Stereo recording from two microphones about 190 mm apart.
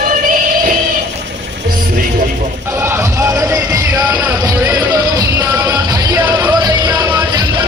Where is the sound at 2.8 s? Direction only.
15° right (ahead or behind).